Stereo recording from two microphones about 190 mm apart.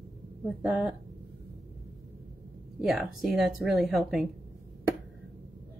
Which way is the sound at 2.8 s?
Centre (ahead or behind).